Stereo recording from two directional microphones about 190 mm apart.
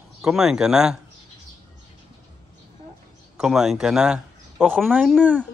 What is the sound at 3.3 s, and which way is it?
Speech, 5° right (ahead or behind).